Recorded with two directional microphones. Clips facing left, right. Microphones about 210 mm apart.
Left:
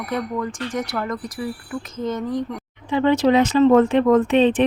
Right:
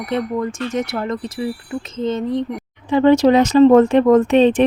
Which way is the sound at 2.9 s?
45° right (ahead or behind).